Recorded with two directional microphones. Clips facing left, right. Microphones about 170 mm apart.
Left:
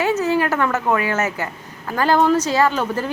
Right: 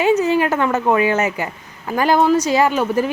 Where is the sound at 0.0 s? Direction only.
15° right (ahead or behind).